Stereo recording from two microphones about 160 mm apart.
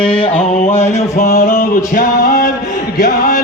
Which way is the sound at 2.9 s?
20° left (ahead or behind).